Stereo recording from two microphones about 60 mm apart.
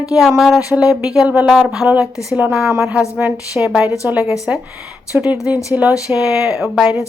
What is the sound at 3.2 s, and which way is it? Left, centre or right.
Speech, right.